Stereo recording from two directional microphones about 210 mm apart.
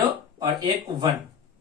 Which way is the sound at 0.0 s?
20° right (ahead or behind).